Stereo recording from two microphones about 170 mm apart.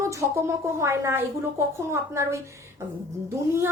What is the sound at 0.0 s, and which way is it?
A woman's voice, 15° right (ahead or behind).